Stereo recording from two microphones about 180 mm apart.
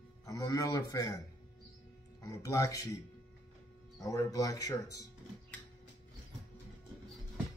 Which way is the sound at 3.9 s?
15° left (ahead or behind).